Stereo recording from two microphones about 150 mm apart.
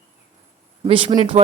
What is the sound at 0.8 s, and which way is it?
Speech, 35° right (ahead or behind).